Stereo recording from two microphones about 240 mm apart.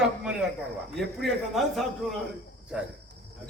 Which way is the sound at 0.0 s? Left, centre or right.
Centre.